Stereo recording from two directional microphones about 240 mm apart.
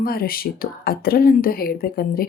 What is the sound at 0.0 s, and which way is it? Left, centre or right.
Speech, left.